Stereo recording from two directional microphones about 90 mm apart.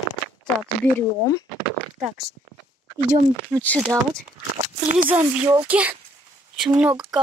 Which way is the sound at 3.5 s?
15° left (ahead or behind).